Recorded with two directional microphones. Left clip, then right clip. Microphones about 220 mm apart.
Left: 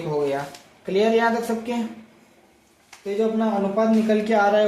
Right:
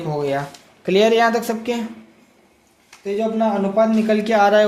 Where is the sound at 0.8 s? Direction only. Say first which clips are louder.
Right 5 dB; 50° right (ahead or behind).